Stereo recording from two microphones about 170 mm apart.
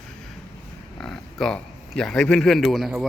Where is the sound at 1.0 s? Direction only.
5° left (ahead or behind).